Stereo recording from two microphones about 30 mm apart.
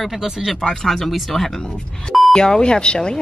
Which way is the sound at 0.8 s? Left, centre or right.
Centre.